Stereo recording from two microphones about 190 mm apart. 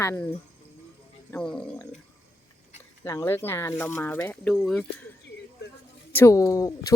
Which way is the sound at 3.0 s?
15° left (ahead or behind).